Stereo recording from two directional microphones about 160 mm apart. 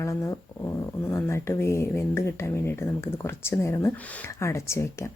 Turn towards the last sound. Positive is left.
turn(degrees=15)  # may be behind; listen again after turning